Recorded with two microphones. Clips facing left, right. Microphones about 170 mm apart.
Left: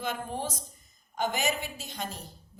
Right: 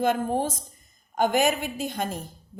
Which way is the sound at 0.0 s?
50° right (ahead or behind).